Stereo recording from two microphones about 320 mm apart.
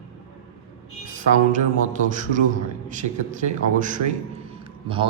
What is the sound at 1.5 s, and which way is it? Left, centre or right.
A man's voice, right.